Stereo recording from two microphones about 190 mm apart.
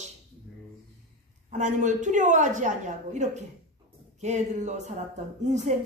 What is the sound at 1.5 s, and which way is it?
Speech, 40° right (ahead or behind).